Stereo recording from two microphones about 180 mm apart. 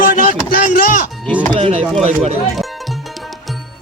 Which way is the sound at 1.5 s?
30° right (ahead or behind).